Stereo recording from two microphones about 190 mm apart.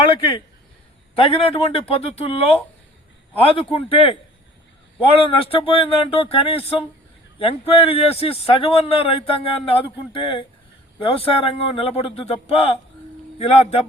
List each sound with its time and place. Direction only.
1.1 s a man's voice: 30° left (ahead or behind)